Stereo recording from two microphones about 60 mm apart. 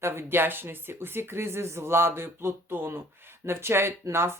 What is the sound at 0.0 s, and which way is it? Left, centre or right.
Speech, right.